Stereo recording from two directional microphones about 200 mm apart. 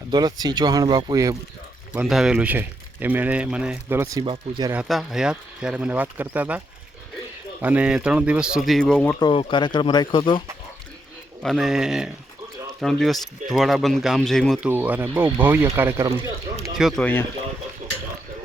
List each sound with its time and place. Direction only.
0.1 s speech: 20° right (ahead or behind)
1.9 s speech: 5° right (ahead or behind); by 4.7 s 20° right (ahead or behind)
4.7 s speech: 5° right (ahead or behind)
7.6 s speech: 5° right (ahead or behind)
9.1 s speech: 25° left (ahead or behind)
11.4 s speech: centre (ahead or behind)
16.7 s speech: centre (ahead or behind)
17.8 s a sound: 40° right (ahead or behind)